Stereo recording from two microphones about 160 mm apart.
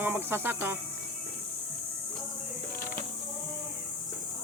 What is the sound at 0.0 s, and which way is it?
Cricket, 15° right (ahead or behind).